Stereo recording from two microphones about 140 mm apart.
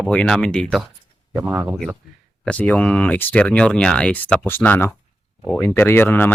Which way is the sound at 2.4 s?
10° left (ahead or behind).